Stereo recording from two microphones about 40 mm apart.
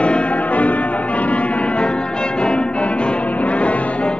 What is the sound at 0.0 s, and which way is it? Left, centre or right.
Music, left.